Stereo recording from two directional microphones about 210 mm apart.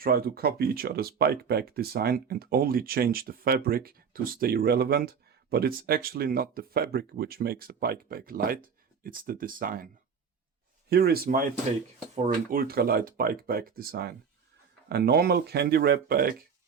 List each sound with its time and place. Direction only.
0.0 s speech: 45° right (ahead or behind)
12.5 s speech: 45° right (ahead or behind)